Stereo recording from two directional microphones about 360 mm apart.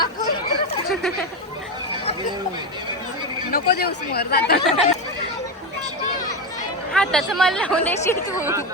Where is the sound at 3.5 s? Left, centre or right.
Left.